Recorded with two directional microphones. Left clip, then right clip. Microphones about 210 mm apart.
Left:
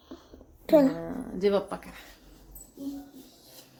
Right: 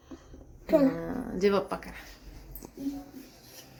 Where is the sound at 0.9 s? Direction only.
10° right (ahead or behind).